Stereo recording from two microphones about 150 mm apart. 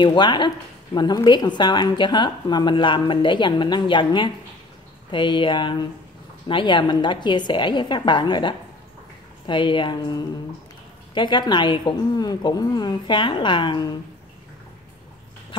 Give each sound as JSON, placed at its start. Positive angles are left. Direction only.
{"t": 0.0, "sound": "a woman's voice", "side_deg": 30}